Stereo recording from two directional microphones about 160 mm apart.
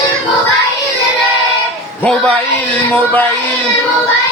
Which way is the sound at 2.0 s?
5° left (ahead or behind).